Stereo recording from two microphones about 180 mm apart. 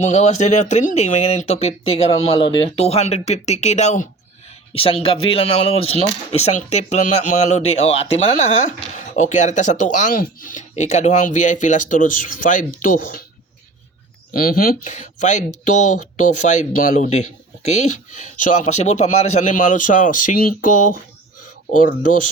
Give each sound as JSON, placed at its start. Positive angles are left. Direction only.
{"t": 0.0, "sound": "speech", "side_deg": 40}
{"t": 14.3, "sound": "speech", "side_deg": 55}